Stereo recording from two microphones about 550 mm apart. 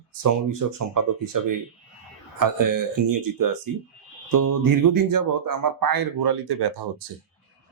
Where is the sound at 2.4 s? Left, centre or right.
Right.